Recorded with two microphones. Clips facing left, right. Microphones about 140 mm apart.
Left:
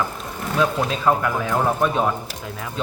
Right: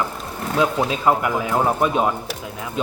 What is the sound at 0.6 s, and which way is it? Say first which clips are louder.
Speech: right 1 dB; 15° right (ahead or behind).